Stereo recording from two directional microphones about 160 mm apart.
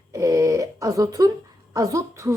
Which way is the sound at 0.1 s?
20° right (ahead or behind).